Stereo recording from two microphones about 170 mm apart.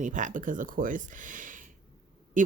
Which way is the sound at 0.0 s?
50° right (ahead or behind).